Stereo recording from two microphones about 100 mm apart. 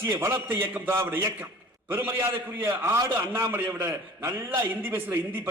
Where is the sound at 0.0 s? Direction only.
25° right (ahead or behind).